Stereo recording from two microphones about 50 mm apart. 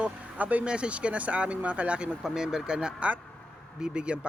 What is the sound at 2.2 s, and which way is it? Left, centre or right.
Speech, centre.